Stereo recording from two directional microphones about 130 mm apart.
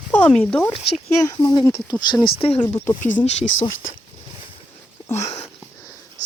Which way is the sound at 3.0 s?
80° left.